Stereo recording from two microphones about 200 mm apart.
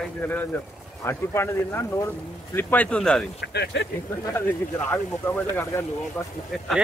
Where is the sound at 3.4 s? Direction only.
55° left (ahead or behind).